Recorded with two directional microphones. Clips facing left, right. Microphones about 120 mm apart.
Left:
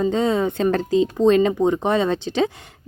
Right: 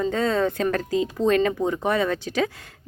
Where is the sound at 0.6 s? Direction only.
25° left (ahead or behind).